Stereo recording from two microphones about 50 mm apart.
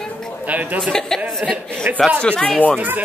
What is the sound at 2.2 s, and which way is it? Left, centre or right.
Speech, centre.